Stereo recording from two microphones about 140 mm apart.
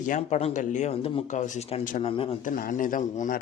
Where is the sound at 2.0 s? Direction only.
40° left (ahead or behind).